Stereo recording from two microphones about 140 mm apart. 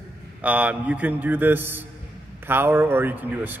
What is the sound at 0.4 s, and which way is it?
A man's voice, 10° right (ahead or behind).